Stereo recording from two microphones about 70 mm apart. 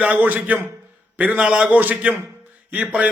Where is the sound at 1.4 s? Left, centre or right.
Centre.